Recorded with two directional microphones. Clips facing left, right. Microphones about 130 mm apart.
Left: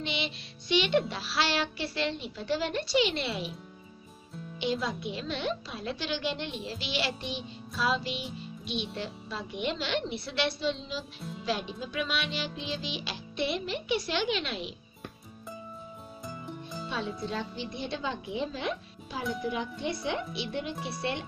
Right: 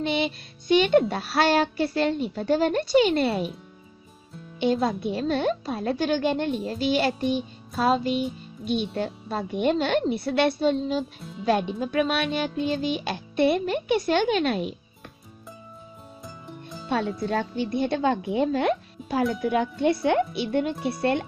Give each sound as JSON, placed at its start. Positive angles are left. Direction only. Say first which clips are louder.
{"t": 0.0, "sound": "a woman's voice", "louder": "right 9 dB", "side_deg": -50}
{"t": 4.6, "sound": "a woman's voice", "louder": "right 8 dB", "side_deg": -50}
{"t": 11.1, "sound": "music", "louder": "right 2 dB", "side_deg": 0}
{"t": 11.4, "sound": "a woman's voice", "louder": "right 10 dB", "side_deg": -55}
{"t": 16.3, "sound": "music", "louder": "left 1 dB", "side_deg": 0}
{"t": 17.3, "sound": "a woman's voice", "louder": "right 9 dB", "side_deg": -55}
{"t": 20.7, "sound": "speech", "louder": "right 8 dB", "side_deg": 0}
{"t": 21.0, "sound": "a woman's voice", "louder": "right 10 dB", "side_deg": -50}